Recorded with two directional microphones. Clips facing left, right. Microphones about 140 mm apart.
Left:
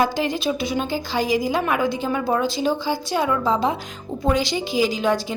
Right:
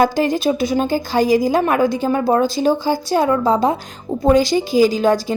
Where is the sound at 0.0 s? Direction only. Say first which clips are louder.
Right 6 dB; 45° right (ahead or behind).